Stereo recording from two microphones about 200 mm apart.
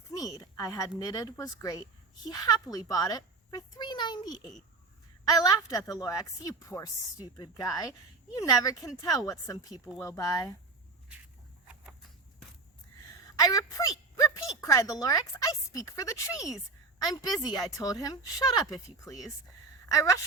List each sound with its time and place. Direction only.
0.1 s a child's voice: 15° left (ahead or behind)
13.4 s a child's voice: 20° left (ahead or behind)